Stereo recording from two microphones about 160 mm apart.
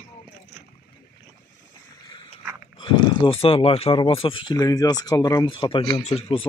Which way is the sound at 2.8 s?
30° left (ahead or behind).